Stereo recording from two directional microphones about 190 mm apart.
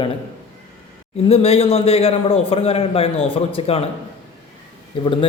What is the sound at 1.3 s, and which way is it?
A man's voice, 30° left (ahead or behind).